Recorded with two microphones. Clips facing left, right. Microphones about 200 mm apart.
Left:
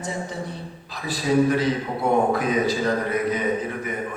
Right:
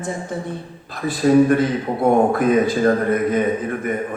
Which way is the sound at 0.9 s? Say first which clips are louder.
Right 7 dB; 50° right (ahead or behind).